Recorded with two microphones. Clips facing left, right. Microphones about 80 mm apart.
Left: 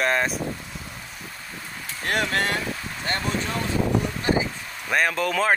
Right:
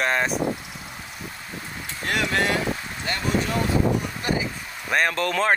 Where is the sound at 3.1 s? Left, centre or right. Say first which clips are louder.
Left 2 dB; left.